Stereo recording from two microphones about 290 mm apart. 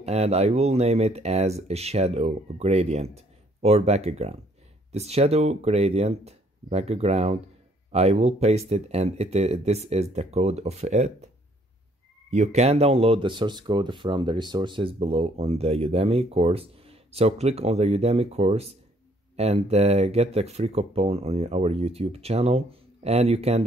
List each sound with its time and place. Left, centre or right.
0.0 s speech: right
12.3 s speech: right